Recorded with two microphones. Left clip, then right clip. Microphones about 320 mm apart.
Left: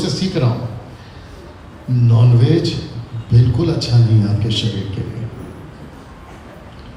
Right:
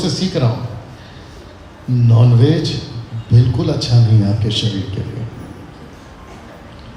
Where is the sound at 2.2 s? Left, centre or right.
Right.